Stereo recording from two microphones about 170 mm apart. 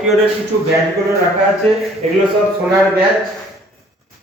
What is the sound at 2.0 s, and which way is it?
Speech, 40° right (ahead or behind).